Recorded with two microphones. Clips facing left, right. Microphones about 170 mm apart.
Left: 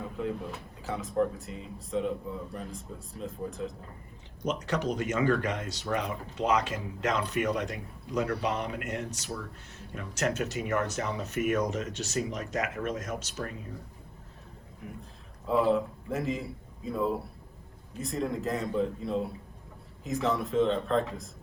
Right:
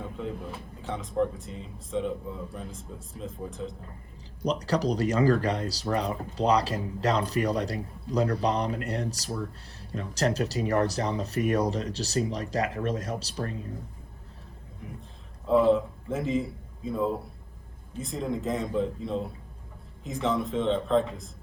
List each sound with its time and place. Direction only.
0.0 s a sound: centre (ahead or behind)
0.8 s speech: centre (ahead or behind)
4.4 s speech: 35° right (ahead or behind)
15.4 s a man's voice: centre (ahead or behind)